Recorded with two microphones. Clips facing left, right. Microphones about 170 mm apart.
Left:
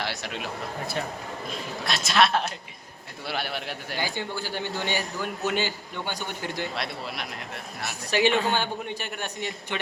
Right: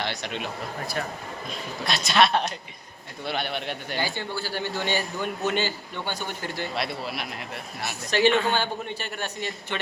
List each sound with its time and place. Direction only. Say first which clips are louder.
0.0 s speech: right 2 dB; 5° left (ahead or behind)
1.5 s a man's voice: right 1 dB; centre (ahead or behind)
4.0 s a man's voice: left 1 dB; 15° left (ahead or behind)
6.7 s a man's voice: right 3 dB; centre (ahead or behind)
8.1 s a man's voice: right 1 dB; 10° left (ahead or behind)